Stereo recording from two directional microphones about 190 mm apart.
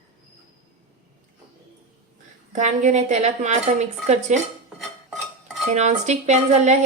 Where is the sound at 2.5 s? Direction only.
40° right (ahead or behind).